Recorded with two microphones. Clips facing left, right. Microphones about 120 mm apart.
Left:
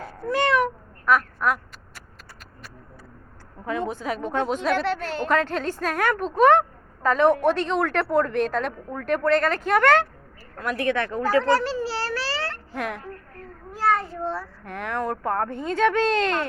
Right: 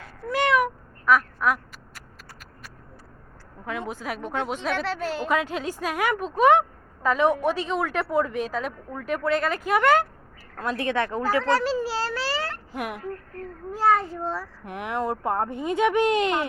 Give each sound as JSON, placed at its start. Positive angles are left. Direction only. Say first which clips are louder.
{"t": 0.3, "sound": "meow", "louder": "left 1 dB", "side_deg": -5}
{"t": 3.7, "sound": "a woman's voice", "louder": "left 4 dB", "side_deg": -10}
{"t": 10.6, "sound": "speech", "louder": "left 1 dB", "side_deg": -25}
{"t": 11.4, "sound": "a child's voice", "louder": "left 2 dB", "side_deg": 0}
{"t": 11.8, "sound": "baby cry", "louder": "even", "side_deg": -15}
{"t": 14.3, "sound": "a woman's voice", "louder": "even", "side_deg": -15}